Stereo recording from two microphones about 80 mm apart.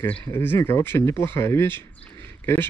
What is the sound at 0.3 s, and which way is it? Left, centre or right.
Speech, left.